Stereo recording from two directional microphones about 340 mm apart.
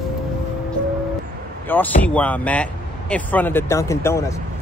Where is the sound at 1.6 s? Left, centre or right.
Centre.